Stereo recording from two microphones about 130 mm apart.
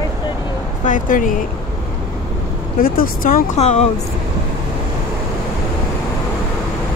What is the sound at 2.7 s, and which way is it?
Speech, 90° left.